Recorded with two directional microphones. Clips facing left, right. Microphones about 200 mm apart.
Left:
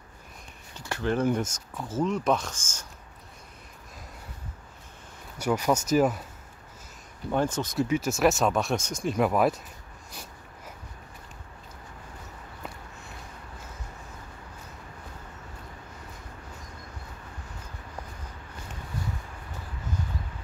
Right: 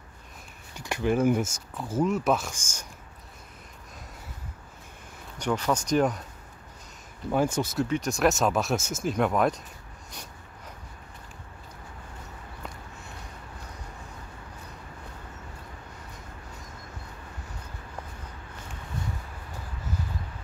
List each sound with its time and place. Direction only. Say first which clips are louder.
0.7 s speech: right 2 dB; 15° right (ahead or behind)
5.4 s speech: left 2 dB; 10° left (ahead or behind)
7.2 s speech: right 2 dB; 10° right (ahead or behind)